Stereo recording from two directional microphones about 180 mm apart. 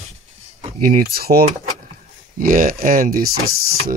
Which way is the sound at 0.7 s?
55° right (ahead or behind).